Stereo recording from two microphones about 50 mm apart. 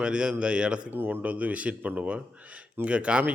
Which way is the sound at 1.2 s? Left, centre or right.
Right.